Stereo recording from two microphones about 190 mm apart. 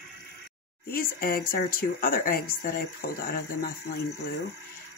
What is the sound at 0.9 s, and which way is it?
Speech, 50° left (ahead or behind).